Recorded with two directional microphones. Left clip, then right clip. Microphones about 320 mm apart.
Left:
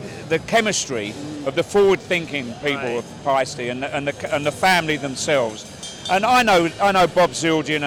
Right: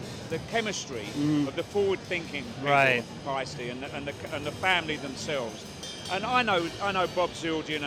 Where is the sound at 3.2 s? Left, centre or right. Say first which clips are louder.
Left 12 dB; left.